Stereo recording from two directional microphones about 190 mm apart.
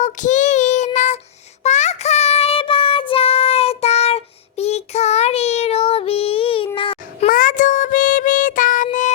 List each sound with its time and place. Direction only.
0.0 s child singing: 40° left (ahead or behind)
6.7 s babbling: 30° left (ahead or behind)
7.3 s child singing: 45° left (ahead or behind)